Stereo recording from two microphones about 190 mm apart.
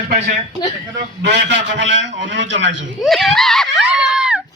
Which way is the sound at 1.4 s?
70° right (ahead or behind).